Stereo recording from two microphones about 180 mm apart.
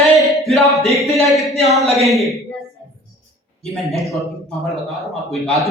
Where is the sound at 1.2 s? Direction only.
15° left (ahead or behind).